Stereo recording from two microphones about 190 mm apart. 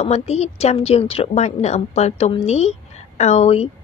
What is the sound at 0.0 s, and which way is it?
Speech, 35° left (ahead or behind).